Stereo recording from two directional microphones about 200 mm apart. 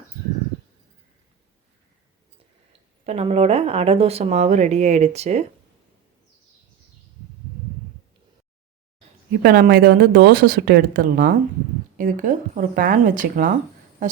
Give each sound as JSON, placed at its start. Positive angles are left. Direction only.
{"t": 3.1, "sound": "speech", "side_deg": -30}
{"t": 9.4, "sound": "speech", "side_deg": -50}